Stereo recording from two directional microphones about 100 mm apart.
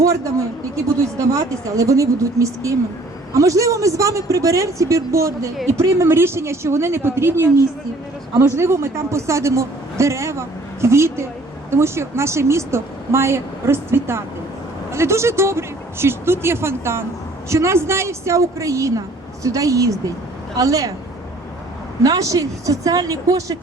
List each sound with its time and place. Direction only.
1.2 s a woman's voice: 35° right (ahead or behind)
22.0 s speech: 35° right (ahead or behind)